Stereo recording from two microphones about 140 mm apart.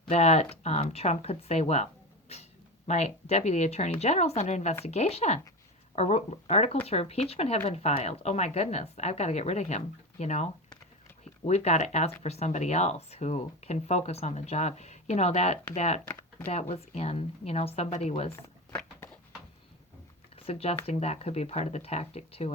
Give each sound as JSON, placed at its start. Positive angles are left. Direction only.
{"t": 0.1, "sound": "speech", "side_deg": 50}
{"t": 20.5, "sound": "speech", "side_deg": 45}